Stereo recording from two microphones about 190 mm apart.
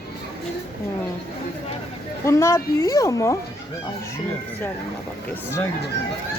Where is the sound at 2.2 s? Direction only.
15° left (ahead or behind).